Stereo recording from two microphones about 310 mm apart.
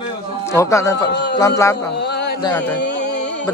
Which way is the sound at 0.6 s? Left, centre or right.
Centre.